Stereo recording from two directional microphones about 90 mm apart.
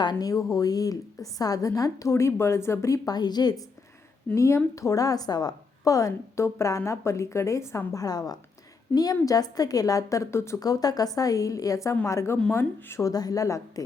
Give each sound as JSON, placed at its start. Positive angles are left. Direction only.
{"t": 0.0, "sound": "a woman's voice", "side_deg": 50}
{"t": 3.2, "sound": "a woman's voice", "side_deg": 50}
{"t": 4.4, "sound": "a woman's voice", "side_deg": 35}
{"t": 7.9, "sound": "a woman's voice", "side_deg": 45}
{"t": 10.6, "sound": "a woman's voice", "side_deg": 45}
{"t": 13.1, "sound": "a woman's voice", "side_deg": 45}